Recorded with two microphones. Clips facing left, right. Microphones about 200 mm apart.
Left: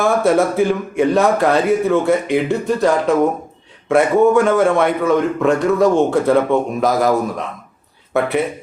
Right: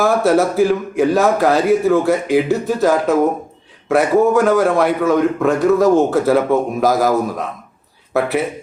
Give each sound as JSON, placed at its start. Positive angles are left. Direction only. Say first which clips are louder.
{"t": 0.0, "sound": "a man's voice", "louder": "right 1 dB", "side_deg": 0}